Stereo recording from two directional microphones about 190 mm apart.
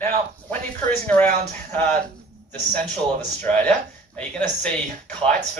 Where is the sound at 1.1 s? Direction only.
10° left (ahead or behind).